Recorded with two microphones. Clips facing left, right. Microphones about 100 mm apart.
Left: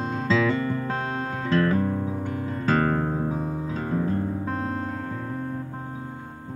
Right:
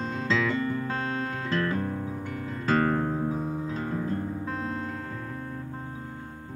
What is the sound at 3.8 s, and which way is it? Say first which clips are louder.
Music: left 8 dB; 20° left (ahead or behind).